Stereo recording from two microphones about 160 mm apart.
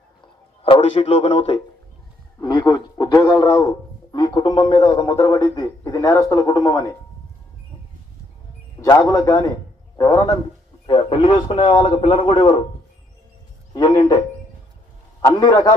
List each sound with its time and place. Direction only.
0.6 s a man's voice: 40° left (ahead or behind)
2.4 s speech: 30° left (ahead or behind)
8.8 s speech: 20° left (ahead or behind)
10.8 s a man's voice: 35° left (ahead or behind)
13.7 s speech: 30° left (ahead or behind)
15.3 s speech: 25° left (ahead or behind)